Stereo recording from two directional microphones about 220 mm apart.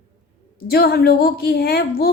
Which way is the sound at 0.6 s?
45° left (ahead or behind).